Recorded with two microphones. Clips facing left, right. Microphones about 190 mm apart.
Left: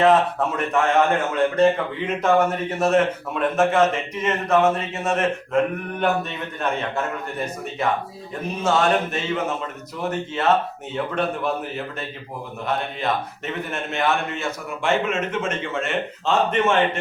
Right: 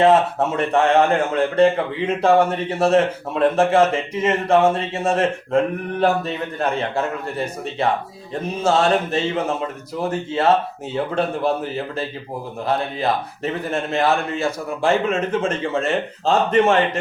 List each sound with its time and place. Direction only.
0.0 s speech: 25° right (ahead or behind)
2.2 s a man's voice: 30° right (ahead or behind)
12.6 s a man's voice: 35° right (ahead or behind)